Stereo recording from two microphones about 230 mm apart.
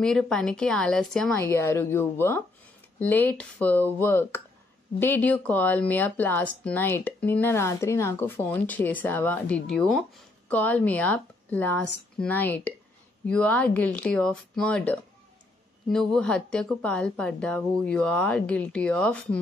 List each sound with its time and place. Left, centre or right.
0.0 s speech: centre